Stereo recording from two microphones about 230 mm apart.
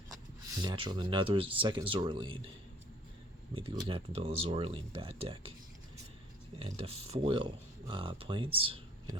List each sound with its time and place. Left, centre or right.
0.6 s speech: centre
3.5 s speech: right
6.6 s speech: right